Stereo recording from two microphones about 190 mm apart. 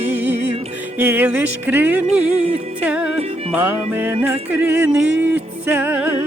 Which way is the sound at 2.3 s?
35° right (ahead or behind).